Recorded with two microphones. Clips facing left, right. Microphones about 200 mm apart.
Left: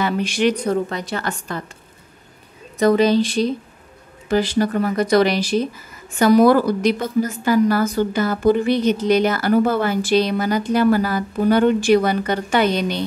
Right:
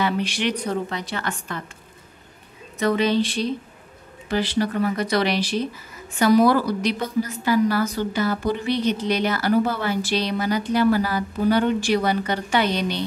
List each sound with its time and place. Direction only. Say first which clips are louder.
0.0 s a woman's voice: left 4 dB; 45° left (ahead or behind)
2.8 s a woman's voice: left 5 dB; 40° left (ahead or behind)